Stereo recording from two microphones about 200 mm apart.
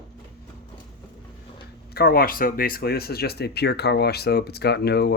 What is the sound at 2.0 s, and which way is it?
Speech, 50° left (ahead or behind).